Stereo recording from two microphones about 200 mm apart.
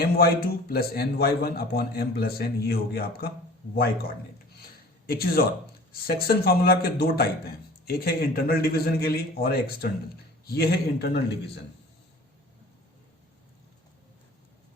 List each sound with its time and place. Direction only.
0.0 s a man's voice: 50° left (ahead or behind)
5.0 s a man's voice: 50° left (ahead or behind)